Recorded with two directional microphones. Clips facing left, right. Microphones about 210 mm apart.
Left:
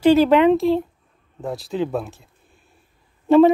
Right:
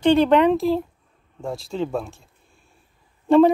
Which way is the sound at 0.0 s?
5° left (ahead or behind).